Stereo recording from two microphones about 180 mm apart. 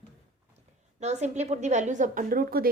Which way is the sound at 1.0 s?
40° right (ahead or behind).